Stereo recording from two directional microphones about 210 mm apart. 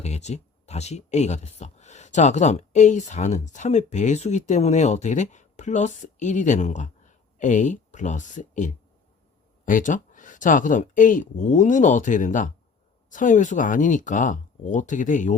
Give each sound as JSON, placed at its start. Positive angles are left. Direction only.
{"t": 0.0, "sound": "speech", "side_deg": 30}